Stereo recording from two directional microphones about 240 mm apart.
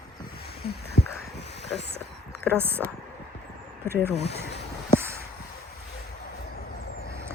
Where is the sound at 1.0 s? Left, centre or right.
Left.